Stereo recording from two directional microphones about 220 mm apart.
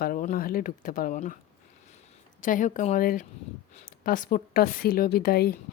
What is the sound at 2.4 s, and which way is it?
Speech, 35° left (ahead or behind).